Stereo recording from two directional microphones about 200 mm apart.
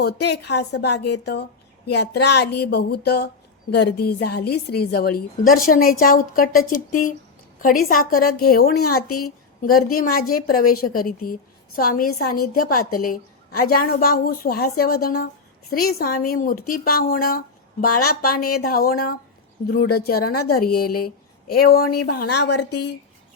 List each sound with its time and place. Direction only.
0.0 s a woman's voice: 55° left (ahead or behind)